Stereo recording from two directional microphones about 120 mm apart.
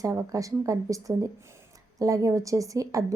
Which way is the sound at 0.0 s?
25° right (ahead or behind).